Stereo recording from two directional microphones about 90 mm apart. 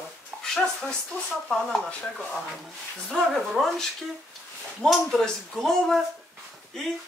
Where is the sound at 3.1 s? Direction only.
Centre (ahead or behind).